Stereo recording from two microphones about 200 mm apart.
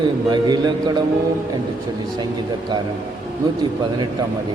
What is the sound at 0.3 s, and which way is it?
Speech, 20° right (ahead or behind).